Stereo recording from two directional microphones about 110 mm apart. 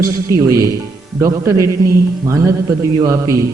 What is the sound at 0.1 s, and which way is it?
A man's voice, 30° right (ahead or behind).